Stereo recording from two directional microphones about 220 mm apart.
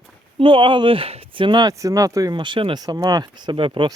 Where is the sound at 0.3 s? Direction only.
25° right (ahead or behind).